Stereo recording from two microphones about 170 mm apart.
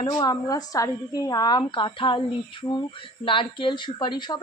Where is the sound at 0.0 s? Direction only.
25° left (ahead or behind).